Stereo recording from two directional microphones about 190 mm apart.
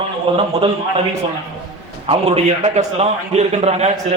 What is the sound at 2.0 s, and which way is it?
A man's voice, 30° right (ahead or behind).